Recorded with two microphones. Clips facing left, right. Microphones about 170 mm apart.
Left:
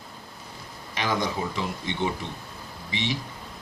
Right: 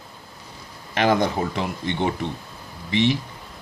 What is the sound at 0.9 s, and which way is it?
Speech, 60° right (ahead or behind).